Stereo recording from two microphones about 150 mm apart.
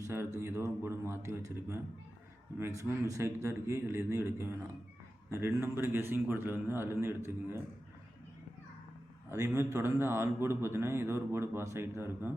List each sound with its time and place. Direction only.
0.0 s a man's voice: 15° right (ahead or behind)
9.6 s a man's voice: 20° right (ahead or behind)